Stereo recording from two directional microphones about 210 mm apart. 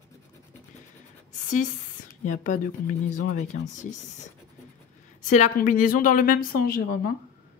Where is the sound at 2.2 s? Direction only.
35° left (ahead or behind).